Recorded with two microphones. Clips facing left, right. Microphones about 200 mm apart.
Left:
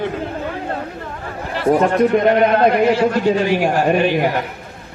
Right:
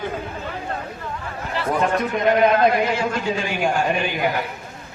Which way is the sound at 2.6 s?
60° left (ahead or behind).